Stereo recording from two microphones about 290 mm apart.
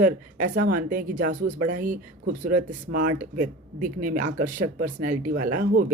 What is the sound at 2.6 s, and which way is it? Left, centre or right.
Speech, right.